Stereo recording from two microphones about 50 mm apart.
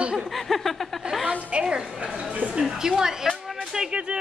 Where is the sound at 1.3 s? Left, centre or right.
Right.